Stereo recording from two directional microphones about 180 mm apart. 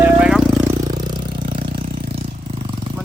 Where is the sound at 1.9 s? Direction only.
60° right (ahead or behind).